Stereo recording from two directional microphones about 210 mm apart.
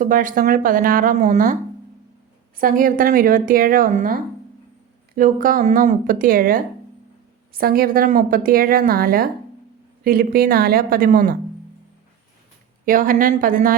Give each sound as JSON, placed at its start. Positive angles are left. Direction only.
{"t": 0.0, "sound": "a woman's voice", "side_deg": -40}
{"t": 2.6, "sound": "a woman's voice", "side_deg": -40}
{"t": 12.8, "sound": "a woman's voice", "side_deg": -40}